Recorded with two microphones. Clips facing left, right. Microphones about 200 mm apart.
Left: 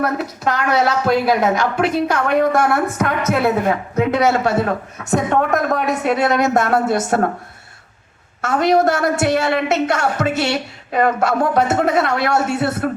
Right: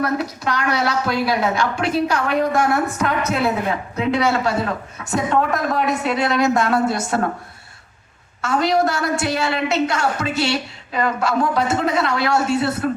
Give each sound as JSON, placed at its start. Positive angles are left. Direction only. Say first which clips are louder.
{"t": 0.0, "sound": "a woman's voice", "louder": "left 2 dB", "side_deg": 45}
{"t": 8.4, "sound": "a woman's voice", "louder": "left 3 dB", "side_deg": 50}